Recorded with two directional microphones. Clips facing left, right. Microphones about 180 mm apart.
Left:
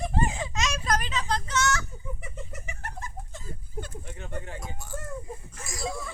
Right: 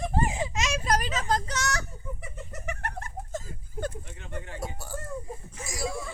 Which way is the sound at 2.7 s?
65° right (ahead or behind).